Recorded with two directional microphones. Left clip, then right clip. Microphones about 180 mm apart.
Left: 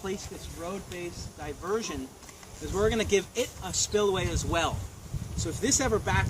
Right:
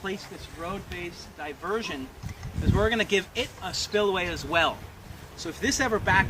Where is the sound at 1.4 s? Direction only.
5° left (ahead or behind).